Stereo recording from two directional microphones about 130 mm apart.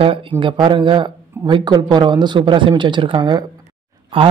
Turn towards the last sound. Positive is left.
turn(degrees=-45)  # may be behind; listen again after turning